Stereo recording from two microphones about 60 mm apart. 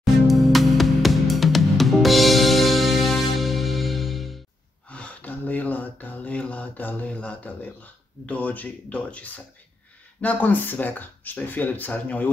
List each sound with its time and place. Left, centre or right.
0.0 s music: centre
4.8 s a sound: left
10.2 s speech: left